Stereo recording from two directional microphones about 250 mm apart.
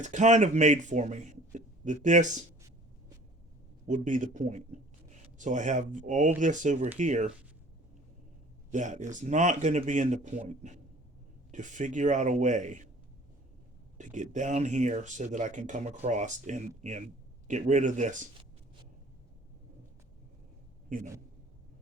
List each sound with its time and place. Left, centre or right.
0.0 s a man's voice: right
3.8 s a man's voice: right
8.7 s a man's voice: right
14.0 s a man's voice: right
20.9 s a man's voice: right